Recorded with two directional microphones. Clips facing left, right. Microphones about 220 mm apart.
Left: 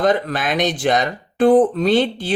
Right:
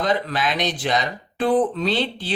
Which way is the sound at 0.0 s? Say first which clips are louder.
Left 4 dB; 50° left (ahead or behind).